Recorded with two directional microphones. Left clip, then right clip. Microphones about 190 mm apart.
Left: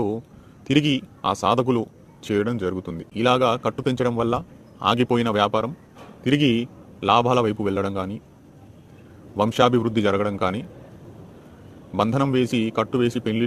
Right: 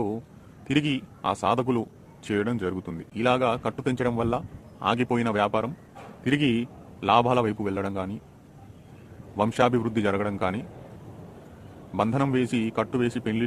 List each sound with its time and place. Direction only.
0.7 s a man's voice: 20° left (ahead or behind)
9.3 s a man's voice: 15° left (ahead or behind)
11.9 s a man's voice: 15° left (ahead or behind)